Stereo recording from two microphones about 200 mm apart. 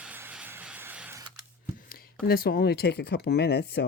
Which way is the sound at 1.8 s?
45° left (ahead or behind).